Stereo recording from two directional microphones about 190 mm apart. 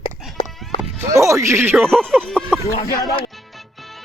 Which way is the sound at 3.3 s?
Centre (ahead or behind).